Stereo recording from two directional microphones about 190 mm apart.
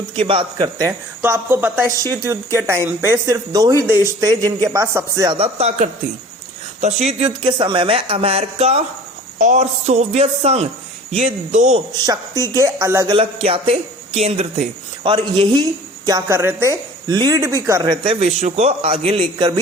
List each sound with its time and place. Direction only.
0.2 s speech: 25° right (ahead or behind)
5.4 s speech: 35° right (ahead or behind)
12.0 s speech: 20° right (ahead or behind)
13.1 s speech: 30° right (ahead or behind)